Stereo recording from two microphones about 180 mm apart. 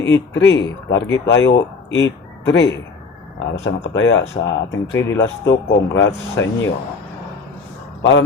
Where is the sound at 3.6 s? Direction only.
90° left.